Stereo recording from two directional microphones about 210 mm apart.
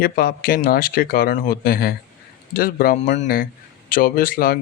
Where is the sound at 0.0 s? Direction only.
45° left (ahead or behind).